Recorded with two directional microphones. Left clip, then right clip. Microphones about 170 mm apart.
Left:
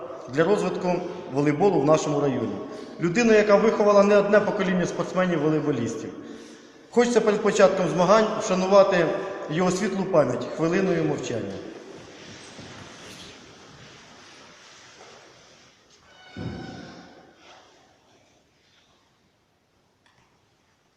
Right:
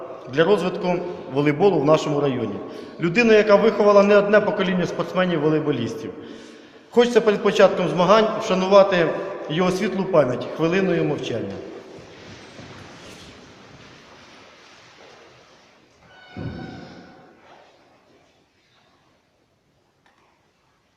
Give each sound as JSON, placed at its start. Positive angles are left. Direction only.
{"t": 0.3, "sound": "a man's voice", "side_deg": 0}
{"t": 6.9, "sound": "a man's voice", "side_deg": 0}